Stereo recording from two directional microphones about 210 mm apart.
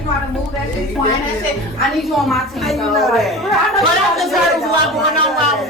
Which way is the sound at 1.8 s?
Centre (ahead or behind).